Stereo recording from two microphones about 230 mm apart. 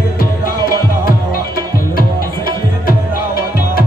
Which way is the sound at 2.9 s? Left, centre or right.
Left.